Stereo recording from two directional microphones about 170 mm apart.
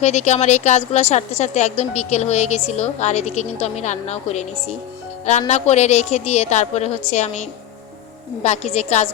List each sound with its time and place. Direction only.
0.0 s a woman's voice: 40° left (ahead or behind)
8.4 s a woman's voice: 40° left (ahead or behind)